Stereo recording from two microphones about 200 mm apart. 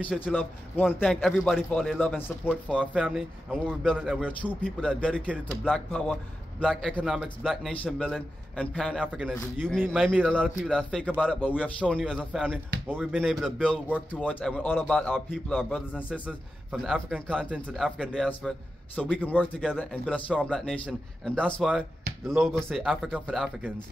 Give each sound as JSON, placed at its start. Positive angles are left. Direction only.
{"t": 0.0, "sound": "a man's voice", "side_deg": 5}